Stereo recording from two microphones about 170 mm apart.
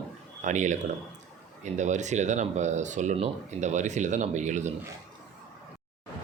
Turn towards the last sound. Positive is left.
turn(degrees=-45)  # may be behind; listen again after turning